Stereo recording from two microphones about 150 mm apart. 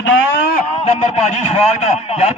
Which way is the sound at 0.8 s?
45° left (ahead or behind).